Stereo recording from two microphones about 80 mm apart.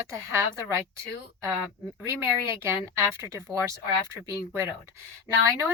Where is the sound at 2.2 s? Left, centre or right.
Right.